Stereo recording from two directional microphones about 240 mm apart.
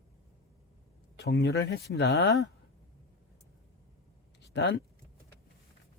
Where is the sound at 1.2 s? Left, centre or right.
Left.